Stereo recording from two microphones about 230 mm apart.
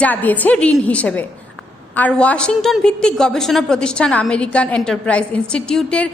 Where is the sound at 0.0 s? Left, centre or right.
Centre.